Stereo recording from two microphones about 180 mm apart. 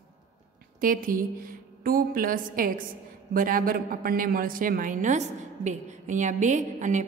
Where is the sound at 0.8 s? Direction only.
50° right (ahead or behind).